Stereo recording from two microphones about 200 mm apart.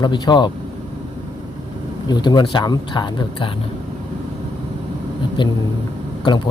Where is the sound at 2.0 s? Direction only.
20° left (ahead or behind).